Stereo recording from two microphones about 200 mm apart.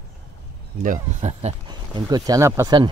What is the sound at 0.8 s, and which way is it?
Speech, 35° right (ahead or behind).